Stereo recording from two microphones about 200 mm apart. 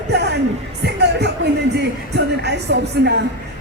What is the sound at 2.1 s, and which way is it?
Music, 60° right (ahead or behind).